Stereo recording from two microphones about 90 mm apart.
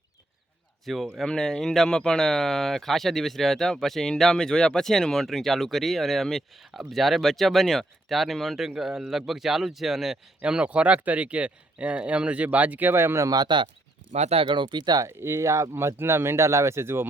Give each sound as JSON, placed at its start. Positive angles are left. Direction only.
{"t": 0.9, "sound": "speech", "side_deg": 0}
{"t": 13.3, "sound": "speech", "side_deg": -55}
{"t": 14.3, "sound": "speech", "side_deg": -65}
{"t": 15.0, "sound": "speech", "side_deg": -30}